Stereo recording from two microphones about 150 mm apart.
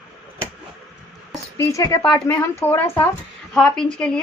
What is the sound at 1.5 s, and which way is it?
A woman's voice, 20° left (ahead or behind).